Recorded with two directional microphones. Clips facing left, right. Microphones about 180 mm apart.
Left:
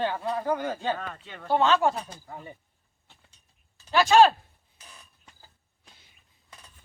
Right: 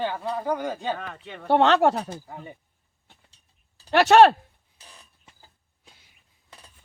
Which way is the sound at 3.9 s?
65° right (ahead or behind).